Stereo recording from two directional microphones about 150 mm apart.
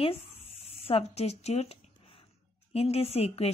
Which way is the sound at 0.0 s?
40° left (ahead or behind).